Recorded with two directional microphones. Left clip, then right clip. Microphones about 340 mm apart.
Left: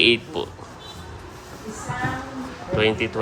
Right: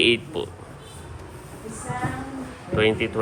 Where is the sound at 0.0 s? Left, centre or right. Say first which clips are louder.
Left 2 dB; centre.